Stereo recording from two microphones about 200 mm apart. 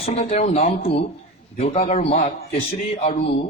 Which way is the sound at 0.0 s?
35° left (ahead or behind).